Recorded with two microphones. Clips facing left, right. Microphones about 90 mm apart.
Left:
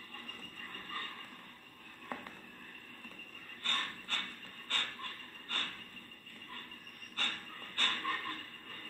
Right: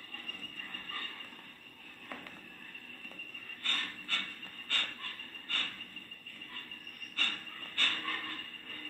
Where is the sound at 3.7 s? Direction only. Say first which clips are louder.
Left 1 dB; 50° right (ahead or behind).